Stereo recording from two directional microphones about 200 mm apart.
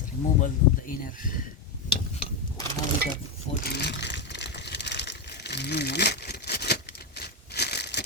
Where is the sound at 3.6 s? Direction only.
55° left (ahead or behind).